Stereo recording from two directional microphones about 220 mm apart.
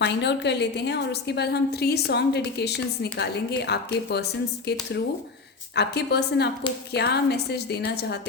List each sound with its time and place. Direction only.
0.0 s a woman's voice: 50° left (ahead or behind)